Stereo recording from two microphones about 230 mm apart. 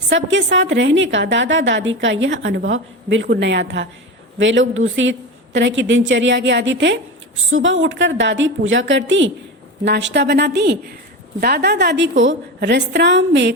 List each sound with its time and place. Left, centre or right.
0.1 s a woman's voice: right